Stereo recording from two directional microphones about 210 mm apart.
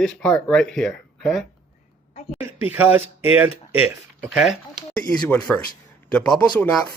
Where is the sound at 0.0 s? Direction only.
5° left (ahead or behind).